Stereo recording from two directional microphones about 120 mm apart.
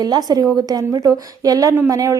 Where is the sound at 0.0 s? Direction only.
35° right (ahead or behind).